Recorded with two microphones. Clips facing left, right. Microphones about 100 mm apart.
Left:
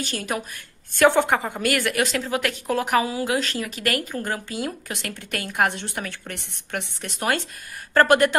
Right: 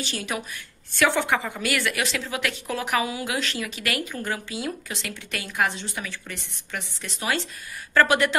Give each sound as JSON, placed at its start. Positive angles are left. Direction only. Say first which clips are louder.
{"t": 0.0, "sound": "a woman's voice", "louder": "left 2 dB", "side_deg": 45}